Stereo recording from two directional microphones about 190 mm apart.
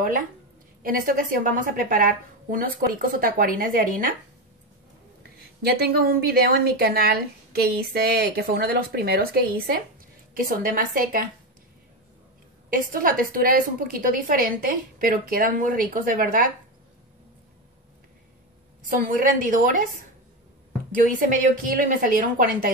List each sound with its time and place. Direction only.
0.8 s a woman's voice: 50° right (ahead or behind)
5.6 s a woman's voice: 55° right (ahead or behind)
12.6 s a woman's voice: 50° right (ahead or behind)
18.9 s a woman's voice: 45° right (ahead or behind)
21.0 s a woman's voice: 45° right (ahead or behind)